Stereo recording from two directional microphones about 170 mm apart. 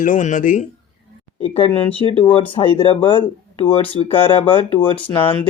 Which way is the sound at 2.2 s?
30° left (ahead or behind).